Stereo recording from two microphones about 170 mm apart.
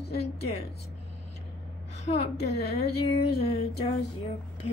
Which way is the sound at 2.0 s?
40° left (ahead or behind).